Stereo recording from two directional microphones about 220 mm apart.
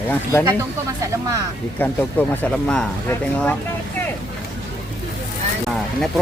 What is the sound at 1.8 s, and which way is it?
Speech, 10° left (ahead or behind).